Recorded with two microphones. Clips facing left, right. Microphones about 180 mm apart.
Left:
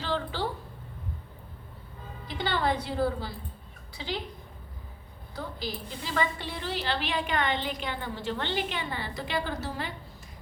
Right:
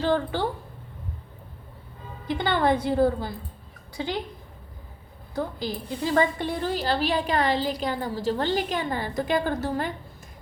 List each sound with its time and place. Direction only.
0.0 s a woman's voice: 50° right (ahead or behind)
2.4 s a woman's voice: 50° right (ahead or behind)
6.1 s a woman's voice: 50° right (ahead or behind)